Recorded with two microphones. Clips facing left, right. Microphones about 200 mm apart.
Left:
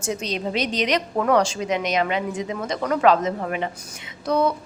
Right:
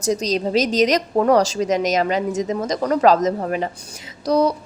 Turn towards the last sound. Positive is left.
turn(degrees=-40)  # may be behind; listen again after turning